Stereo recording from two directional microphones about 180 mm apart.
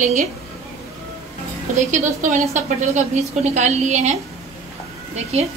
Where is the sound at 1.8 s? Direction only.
45° right (ahead or behind).